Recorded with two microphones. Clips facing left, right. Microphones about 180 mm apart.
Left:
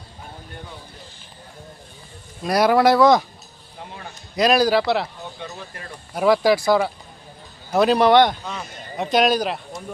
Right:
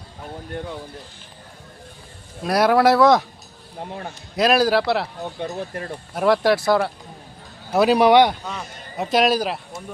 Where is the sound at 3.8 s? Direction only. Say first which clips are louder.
Right 6 dB; 45° right (ahead or behind).